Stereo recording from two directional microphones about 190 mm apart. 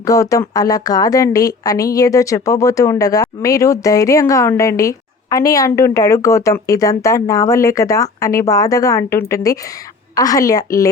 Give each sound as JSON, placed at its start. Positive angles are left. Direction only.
{"t": 0.0, "sound": "a woman's voice", "side_deg": 15}